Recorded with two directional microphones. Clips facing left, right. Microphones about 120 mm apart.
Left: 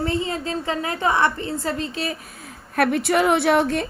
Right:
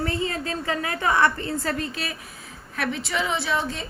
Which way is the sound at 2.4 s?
55° left (ahead or behind).